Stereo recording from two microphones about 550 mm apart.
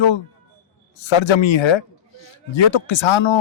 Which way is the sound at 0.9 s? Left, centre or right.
Left.